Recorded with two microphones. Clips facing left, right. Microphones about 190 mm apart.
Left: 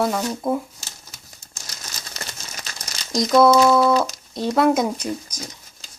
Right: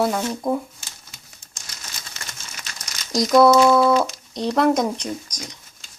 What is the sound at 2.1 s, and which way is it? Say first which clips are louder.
Crumpling: left 4 dB; 35° left (ahead or behind).